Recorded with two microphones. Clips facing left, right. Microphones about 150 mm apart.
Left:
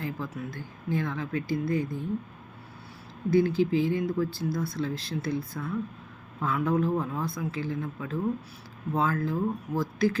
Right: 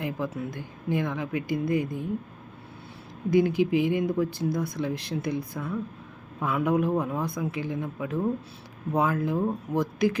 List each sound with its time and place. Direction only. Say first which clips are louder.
0.0 s speech: right 4 dB; 15° right (ahead or behind)
3.2 s speech: right 1 dB; 15° right (ahead or behind)